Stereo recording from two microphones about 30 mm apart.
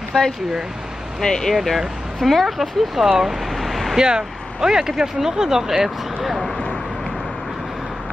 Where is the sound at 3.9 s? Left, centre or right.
Right.